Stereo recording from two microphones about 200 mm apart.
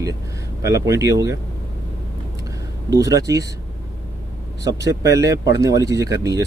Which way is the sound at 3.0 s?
15° right (ahead or behind).